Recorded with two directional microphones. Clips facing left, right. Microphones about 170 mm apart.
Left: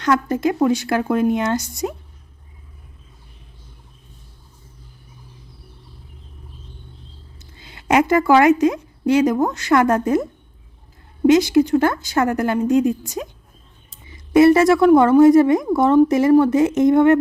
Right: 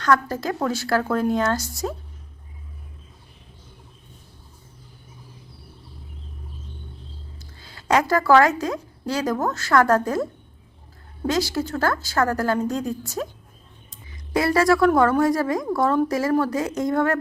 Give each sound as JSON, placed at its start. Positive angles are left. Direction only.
{"t": 0.0, "sound": "speech", "side_deg": 20}
{"t": 7.3, "sound": "a woman's voice", "side_deg": 20}
{"t": 11.3, "sound": "speech", "side_deg": 20}
{"t": 14.3, "sound": "speech", "side_deg": 25}